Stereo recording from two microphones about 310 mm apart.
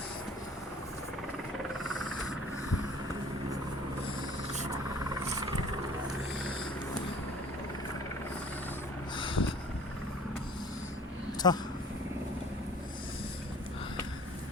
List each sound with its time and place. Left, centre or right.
1.8 s a sound: centre
5.2 s vehicle: centre
9.1 s vehicle: centre
11.4 s speech: centre